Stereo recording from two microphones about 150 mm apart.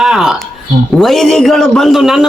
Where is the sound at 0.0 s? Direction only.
Centre (ahead or behind).